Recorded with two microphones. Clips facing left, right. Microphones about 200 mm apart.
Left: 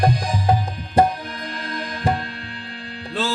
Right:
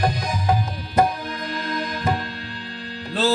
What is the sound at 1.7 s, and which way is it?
Music, 30° left (ahead or behind).